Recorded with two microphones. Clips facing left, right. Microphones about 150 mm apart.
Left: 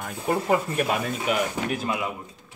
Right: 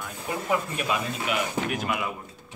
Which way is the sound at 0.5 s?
50° left (ahead or behind).